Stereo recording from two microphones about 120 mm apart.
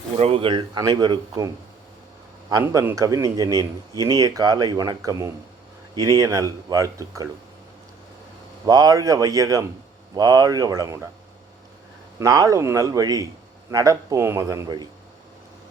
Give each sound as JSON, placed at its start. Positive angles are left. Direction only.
{"t": 0.2, "sound": "speech", "side_deg": -50}
{"t": 0.8, "sound": "speech", "side_deg": -30}
{"t": 2.6, "sound": "a man's voice", "side_deg": -15}
{"t": 2.9, "sound": "speech", "side_deg": -30}
{"t": 8.6, "sound": "speech", "side_deg": -30}
{"t": 12.2, "sound": "speech", "side_deg": -30}